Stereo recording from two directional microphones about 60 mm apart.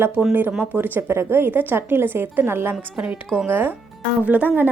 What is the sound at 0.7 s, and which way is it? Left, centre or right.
A woman's voice, right.